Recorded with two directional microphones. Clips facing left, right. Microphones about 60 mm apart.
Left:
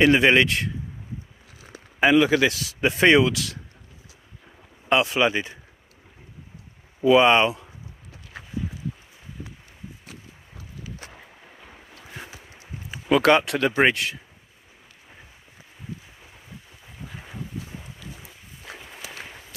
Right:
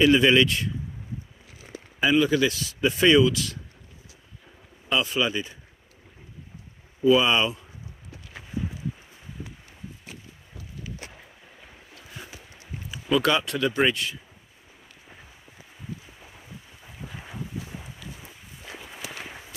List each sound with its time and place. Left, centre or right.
0.0 s speech: left
2.0 s speech: left
4.8 s speech: left
7.0 s speech: left
13.1 s speech: left